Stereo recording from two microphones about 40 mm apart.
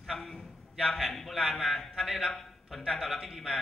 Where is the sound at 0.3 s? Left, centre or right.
Centre.